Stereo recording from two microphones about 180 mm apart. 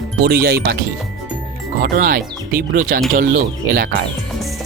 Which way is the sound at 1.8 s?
55° right (ahead or behind).